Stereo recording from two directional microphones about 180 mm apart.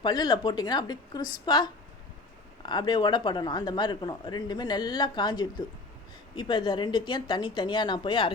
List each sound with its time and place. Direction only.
0.0 s speech: 25° left (ahead or behind)